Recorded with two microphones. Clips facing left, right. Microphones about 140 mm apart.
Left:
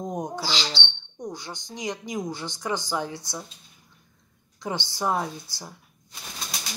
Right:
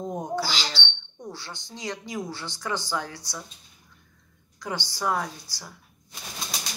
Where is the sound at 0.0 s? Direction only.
15° left (ahead or behind).